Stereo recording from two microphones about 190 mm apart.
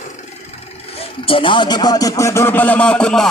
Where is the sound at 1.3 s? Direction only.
25° left (ahead or behind).